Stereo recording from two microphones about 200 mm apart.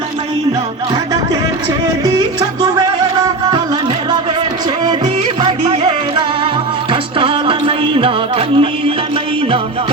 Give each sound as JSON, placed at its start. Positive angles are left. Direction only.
{"t": 5.4, "sound": "music", "side_deg": -25}